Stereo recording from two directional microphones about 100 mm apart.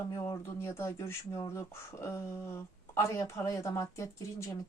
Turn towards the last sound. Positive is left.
turn(degrees=30)  # may be behind; listen again after turning